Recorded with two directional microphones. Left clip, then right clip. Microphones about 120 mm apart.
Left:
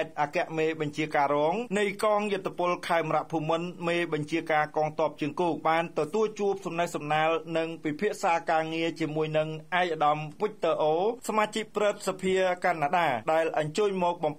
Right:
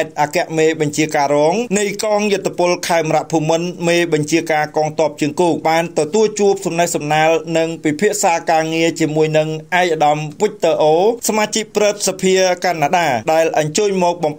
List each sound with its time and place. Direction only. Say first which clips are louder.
0.0 s speech: right 12 dB; 25° right (ahead or behind)